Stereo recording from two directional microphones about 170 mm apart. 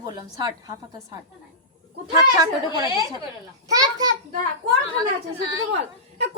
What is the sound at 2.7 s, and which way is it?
Speech, 20° right (ahead or behind).